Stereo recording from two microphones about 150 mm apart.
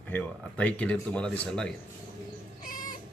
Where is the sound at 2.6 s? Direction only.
70° left (ahead or behind).